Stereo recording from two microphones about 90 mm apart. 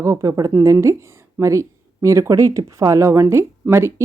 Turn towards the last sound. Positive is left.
turn(degrees=-30)  # may be behind; listen again after turning